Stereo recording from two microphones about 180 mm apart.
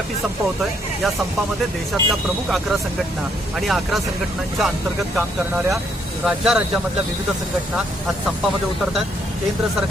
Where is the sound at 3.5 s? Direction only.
Centre (ahead or behind).